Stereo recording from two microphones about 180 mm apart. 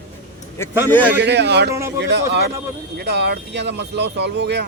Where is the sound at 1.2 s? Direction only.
70° right (ahead or behind).